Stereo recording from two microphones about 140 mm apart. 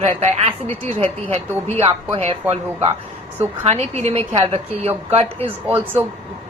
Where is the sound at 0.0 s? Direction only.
55° right (ahead or behind).